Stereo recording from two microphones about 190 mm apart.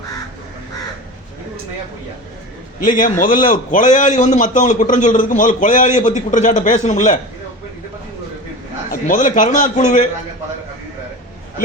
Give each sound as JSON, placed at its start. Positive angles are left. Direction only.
{"t": 2.8, "sound": "a man's voice", "side_deg": 45}
{"t": 8.9, "sound": "a man's voice", "side_deg": 45}